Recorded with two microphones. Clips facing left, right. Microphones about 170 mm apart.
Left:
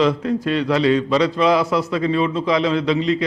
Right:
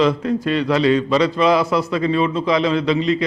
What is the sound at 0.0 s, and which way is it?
A man's voice, 15° right (ahead or behind).